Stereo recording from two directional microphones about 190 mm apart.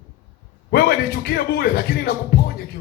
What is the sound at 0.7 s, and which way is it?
Speech, 55° left (ahead or behind).